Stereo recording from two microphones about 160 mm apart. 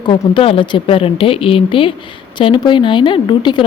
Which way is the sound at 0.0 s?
30° left (ahead or behind).